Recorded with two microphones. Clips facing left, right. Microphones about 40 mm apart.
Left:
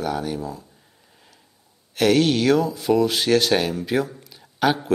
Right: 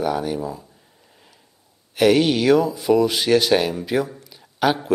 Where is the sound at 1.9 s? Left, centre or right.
Centre.